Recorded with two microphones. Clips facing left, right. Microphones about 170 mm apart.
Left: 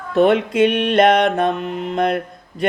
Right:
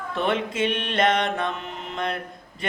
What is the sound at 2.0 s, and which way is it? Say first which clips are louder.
Mantra: left 9 dB; 55° left (ahead or behind).